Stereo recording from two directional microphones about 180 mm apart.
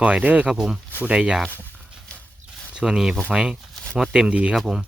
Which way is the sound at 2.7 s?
5° right (ahead or behind).